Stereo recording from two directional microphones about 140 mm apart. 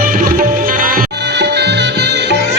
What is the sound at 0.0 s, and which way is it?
Music, 80° right.